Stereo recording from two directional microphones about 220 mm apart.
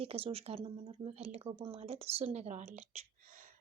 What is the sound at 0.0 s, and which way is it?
A woman's voice, 25° right (ahead or behind).